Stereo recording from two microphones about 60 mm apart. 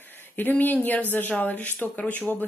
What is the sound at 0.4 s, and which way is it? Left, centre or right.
Speech, left.